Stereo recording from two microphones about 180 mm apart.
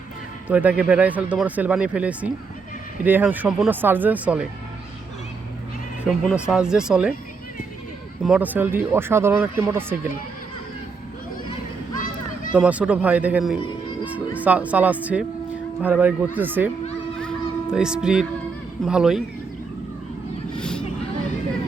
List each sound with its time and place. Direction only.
0.4 s speech: 10° right (ahead or behind)
6.1 s speech: 5° right (ahead or behind)
8.2 s speech: 5° right (ahead or behind)
11.9 s a sound: 45° left (ahead or behind)
12.5 s speech: 5° right (ahead or behind)
17.2 s music: centre (ahead or behind)
18.9 s speech: 5° right (ahead or behind)
20.6 s a sound: 5° left (ahead or behind)